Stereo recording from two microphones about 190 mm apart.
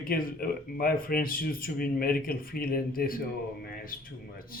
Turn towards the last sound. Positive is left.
turn(degrees=50)  # may be behind; listen again after turning